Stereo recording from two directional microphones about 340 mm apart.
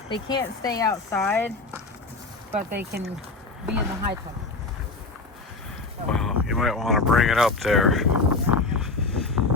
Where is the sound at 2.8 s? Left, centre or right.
Right.